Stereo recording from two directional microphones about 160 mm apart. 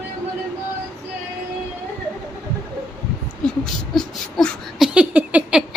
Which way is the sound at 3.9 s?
Centre (ahead or behind).